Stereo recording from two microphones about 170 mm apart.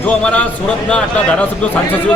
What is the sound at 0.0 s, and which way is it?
A man's voice, 5° left (ahead or behind).